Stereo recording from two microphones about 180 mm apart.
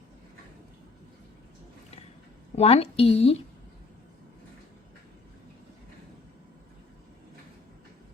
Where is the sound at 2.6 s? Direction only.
35° left (ahead or behind).